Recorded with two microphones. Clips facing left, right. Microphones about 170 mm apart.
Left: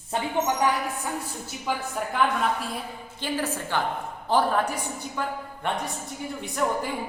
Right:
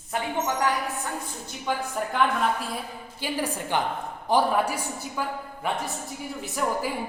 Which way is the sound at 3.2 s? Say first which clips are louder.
Even; 15° right (ahead or behind).